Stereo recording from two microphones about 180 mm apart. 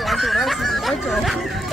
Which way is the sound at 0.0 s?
Centre (ahead or behind).